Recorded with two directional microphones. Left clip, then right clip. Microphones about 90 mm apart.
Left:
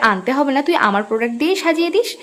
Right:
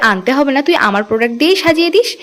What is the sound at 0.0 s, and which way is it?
A woman's voice, 35° right (ahead or behind).